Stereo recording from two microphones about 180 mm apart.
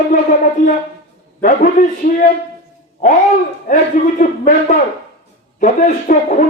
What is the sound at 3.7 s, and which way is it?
Speech, 45° left (ahead or behind).